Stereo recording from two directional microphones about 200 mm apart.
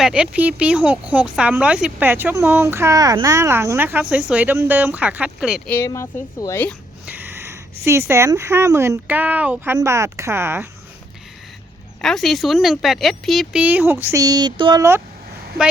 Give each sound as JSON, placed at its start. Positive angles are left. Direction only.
{"t": 0.0, "sound": "speech", "side_deg": -5}
{"t": 5.7, "sound": "a woman's voice", "side_deg": 15}
{"t": 7.0, "sound": "speech", "side_deg": -10}
{"t": 12.0, "sound": "speech", "side_deg": 0}
{"t": 15.6, "sound": "a woman's voice", "side_deg": -55}